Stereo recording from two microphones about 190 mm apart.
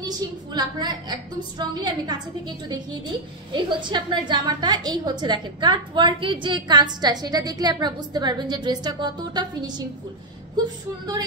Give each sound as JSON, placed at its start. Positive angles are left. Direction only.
{"t": 0.0, "sound": "a woman's voice", "side_deg": -20}